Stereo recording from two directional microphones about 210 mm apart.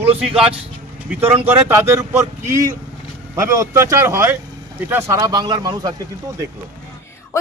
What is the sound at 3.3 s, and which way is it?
Speech, 15° right (ahead or behind).